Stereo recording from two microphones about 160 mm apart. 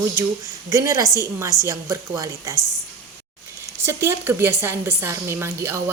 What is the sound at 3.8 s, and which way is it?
A woman's voice, 15° right (ahead or behind).